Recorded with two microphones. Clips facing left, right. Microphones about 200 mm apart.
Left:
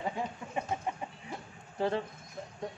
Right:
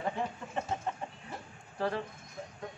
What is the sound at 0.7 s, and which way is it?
Chicken, 10° left (ahead or behind).